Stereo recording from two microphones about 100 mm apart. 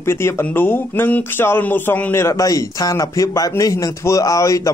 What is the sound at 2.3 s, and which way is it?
A man's voice, 35° left (ahead or behind).